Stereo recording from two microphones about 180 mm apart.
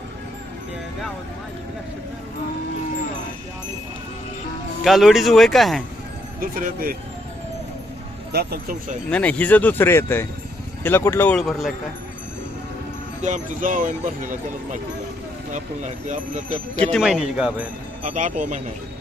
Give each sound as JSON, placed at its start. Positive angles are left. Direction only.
{"t": 4.8, "sound": "speech", "side_deg": 0}
{"t": 6.4, "sound": "speech", "side_deg": -50}
{"t": 8.3, "sound": "speech", "side_deg": -60}
{"t": 9.0, "sound": "speech", "side_deg": 5}
{"t": 13.2, "sound": "speech", "side_deg": -45}
{"t": 15.5, "sound": "speech", "side_deg": -45}
{"t": 16.9, "sound": "speech", "side_deg": 0}
{"t": 18.0, "sound": "speech", "side_deg": -45}